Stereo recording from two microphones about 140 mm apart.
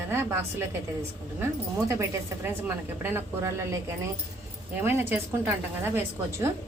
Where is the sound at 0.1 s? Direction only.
20° right (ahead or behind).